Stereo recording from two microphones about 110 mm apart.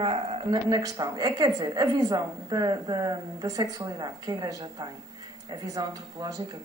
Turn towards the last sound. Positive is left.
turn(degrees=-40)  # may be behind; listen again after turning